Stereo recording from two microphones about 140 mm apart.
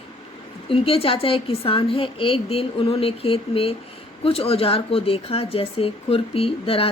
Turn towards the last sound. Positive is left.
turn(degrees=45)  # may be behind; listen again after turning